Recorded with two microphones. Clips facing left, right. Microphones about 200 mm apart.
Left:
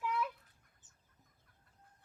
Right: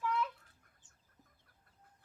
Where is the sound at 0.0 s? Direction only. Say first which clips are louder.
Right 1 dB; 15° left (ahead or behind).